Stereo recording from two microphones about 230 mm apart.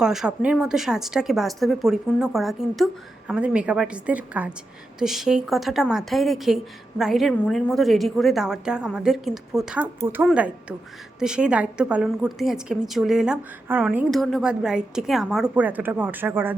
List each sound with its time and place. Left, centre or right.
0.0 s a woman's voice: centre